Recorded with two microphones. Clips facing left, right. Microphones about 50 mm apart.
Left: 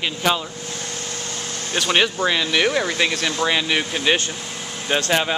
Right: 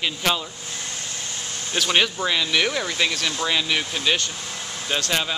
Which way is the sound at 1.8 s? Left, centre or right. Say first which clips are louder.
Left 2 dB; centre.